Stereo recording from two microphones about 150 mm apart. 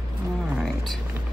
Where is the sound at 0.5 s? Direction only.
Centre (ahead or behind).